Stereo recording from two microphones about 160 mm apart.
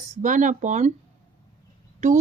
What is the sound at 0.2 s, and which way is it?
Speech, 50° right (ahead or behind).